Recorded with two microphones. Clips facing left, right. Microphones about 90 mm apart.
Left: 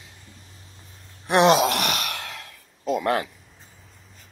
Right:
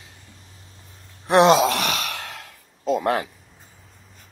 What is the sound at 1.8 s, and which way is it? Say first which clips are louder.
Sigh: right 1 dB; 35° right (ahead or behind).